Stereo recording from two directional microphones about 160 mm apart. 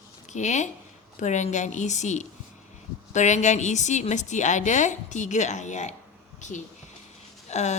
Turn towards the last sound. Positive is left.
turn(degrees=45)  # may be behind; listen again after turning